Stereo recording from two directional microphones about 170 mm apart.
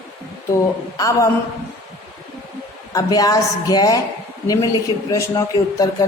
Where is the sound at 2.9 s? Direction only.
20° left (ahead or behind).